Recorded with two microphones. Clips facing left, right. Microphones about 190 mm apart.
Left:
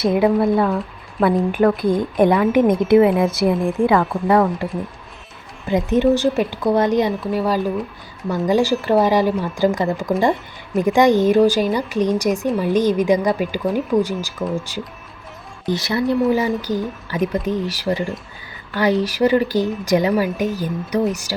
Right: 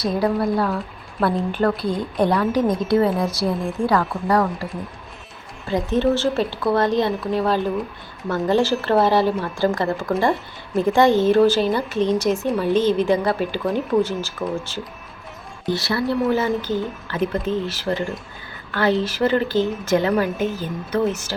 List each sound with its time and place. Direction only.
0.0 s a woman's voice: 20° left (ahead or behind)
1.2 s a woman's voice: centre (ahead or behind)
2.1 s a woman's voice: 20° left (ahead or behind)
12.5 s a woman's voice: centre (ahead or behind)
12.7 s a woman's voice: 15° left (ahead or behind)